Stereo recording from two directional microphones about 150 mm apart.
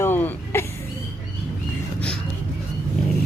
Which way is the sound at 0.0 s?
15° left (ahead or behind).